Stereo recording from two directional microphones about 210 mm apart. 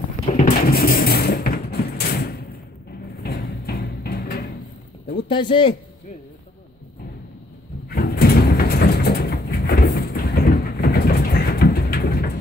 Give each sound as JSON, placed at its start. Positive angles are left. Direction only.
{"t": 0.3, "sound": "a sound", "side_deg": 45}
{"t": 3.2, "sound": "music", "side_deg": 45}
{"t": 5.3, "sound": "speech", "side_deg": 25}
{"t": 7.9, "sound": "sliding door", "side_deg": 45}